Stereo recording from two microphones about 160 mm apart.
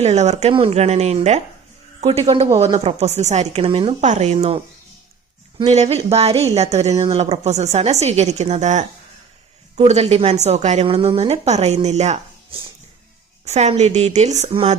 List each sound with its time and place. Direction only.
0.0 s a woman's voice: 45° right (ahead or behind)
5.6 s a woman's voice: 45° right (ahead or behind)
14.5 s speech: 35° right (ahead or behind)